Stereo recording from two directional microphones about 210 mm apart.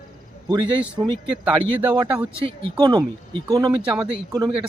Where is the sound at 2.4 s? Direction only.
25° right (ahead or behind).